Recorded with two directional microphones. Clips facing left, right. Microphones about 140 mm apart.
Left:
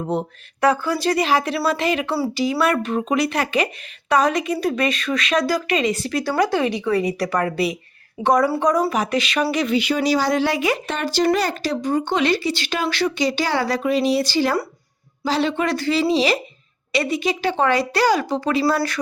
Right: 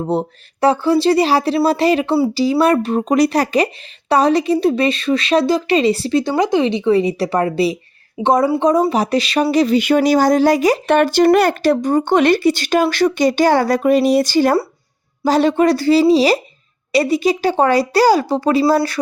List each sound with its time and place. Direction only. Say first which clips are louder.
0.0 s speech: right 5 dB; 30° right (ahead or behind)
9.8 s speech: right 7 dB; 55° right (ahead or behind)
10.8 s speech: right 10 dB; 60° right (ahead or behind); by 18.8 s 35° right (ahead or behind)